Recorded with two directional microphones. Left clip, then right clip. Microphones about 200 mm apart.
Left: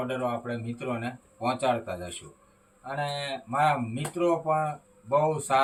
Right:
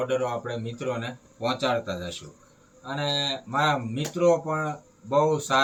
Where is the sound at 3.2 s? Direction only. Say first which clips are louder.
Left 2 dB; 15° left (ahead or behind).